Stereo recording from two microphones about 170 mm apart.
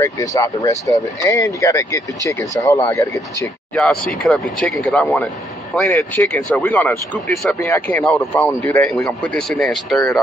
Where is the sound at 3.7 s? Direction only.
5° left (ahead or behind).